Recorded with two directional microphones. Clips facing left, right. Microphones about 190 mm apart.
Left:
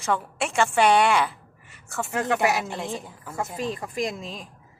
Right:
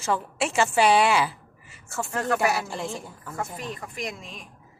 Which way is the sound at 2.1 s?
20° left (ahead or behind).